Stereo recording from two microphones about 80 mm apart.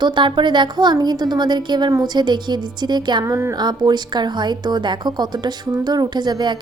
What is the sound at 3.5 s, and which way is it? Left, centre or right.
Speech, right.